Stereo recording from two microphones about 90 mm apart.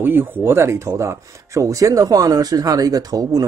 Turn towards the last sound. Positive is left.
turn(degrees=-45)  # may be behind; listen again after turning